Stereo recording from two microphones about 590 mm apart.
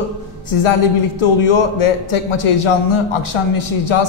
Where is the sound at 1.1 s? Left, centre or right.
Left.